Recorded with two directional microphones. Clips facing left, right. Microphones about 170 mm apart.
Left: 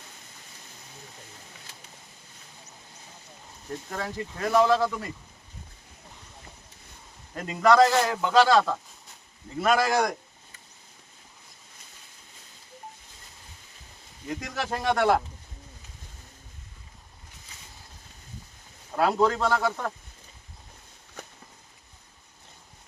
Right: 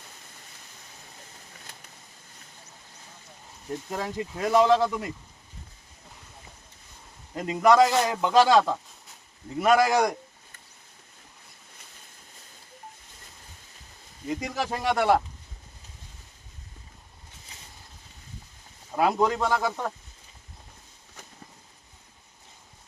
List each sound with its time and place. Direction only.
3.8 s a man's voice: 15° right (ahead or behind)
7.3 s a man's voice: 15° right (ahead or behind)
14.3 s a man's voice: 10° right (ahead or behind)
18.9 s a man's voice: 15° right (ahead or behind)